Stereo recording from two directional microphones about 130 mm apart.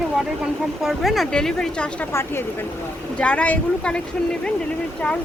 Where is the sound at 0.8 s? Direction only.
Centre (ahead or behind).